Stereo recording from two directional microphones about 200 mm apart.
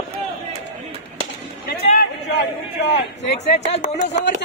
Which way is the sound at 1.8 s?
40° left (ahead or behind).